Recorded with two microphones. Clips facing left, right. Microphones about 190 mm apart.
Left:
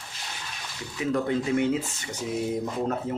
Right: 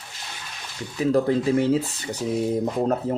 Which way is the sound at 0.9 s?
35° right (ahead or behind).